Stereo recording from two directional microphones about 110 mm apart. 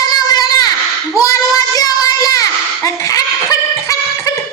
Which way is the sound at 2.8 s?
30° left (ahead or behind).